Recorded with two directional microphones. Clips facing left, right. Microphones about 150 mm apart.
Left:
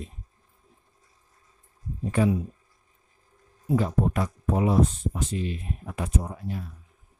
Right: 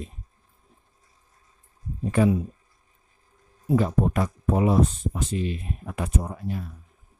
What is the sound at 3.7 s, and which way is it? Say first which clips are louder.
Speech: right 2 dB; 60° right (ahead or behind).